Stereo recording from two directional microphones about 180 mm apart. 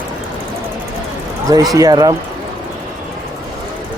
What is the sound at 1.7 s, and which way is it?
Speech, 20° right (ahead or behind).